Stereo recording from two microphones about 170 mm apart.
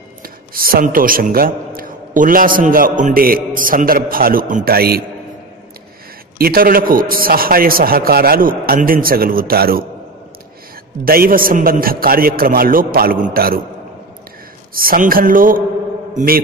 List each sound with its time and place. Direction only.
0.2 s a man's voice: 60° right (ahead or behind)
6.3 s a man's voice: 60° right (ahead or behind)
11.1 s a man's voice: 60° right (ahead or behind)
14.7 s a man's voice: 60° right (ahead or behind)